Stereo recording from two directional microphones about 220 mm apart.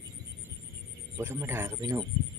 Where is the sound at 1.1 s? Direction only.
10° right (ahead or behind).